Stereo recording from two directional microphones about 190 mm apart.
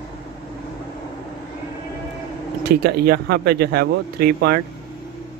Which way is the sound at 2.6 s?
55° right (ahead or behind).